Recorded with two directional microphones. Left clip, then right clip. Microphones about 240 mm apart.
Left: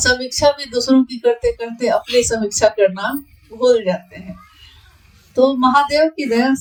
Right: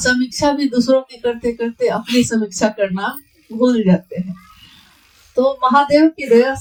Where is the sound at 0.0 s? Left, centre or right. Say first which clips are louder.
Left 2 dB; left.